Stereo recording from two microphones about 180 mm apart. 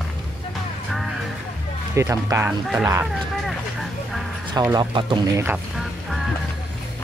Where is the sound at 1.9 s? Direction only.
15° right (ahead or behind).